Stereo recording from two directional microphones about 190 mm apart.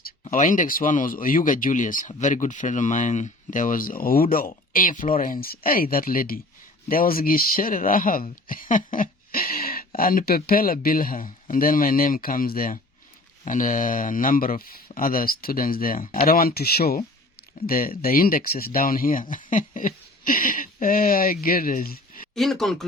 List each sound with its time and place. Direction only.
0.0 s speech: 45° left (ahead or behind)
22.4 s speech: centre (ahead or behind)